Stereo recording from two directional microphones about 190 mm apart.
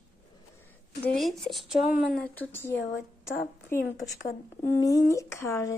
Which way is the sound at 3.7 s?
45° left (ahead or behind).